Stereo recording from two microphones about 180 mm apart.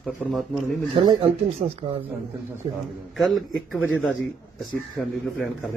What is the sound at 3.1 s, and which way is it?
Speech, centre (ahead or behind).